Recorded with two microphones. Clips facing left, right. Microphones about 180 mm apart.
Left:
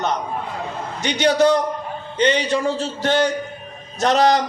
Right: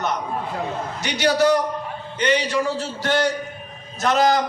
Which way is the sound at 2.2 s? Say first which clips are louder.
Left 2 dB; 25° left (ahead or behind).